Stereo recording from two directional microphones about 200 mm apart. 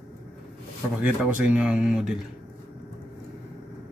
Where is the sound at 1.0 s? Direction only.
5° right (ahead or behind).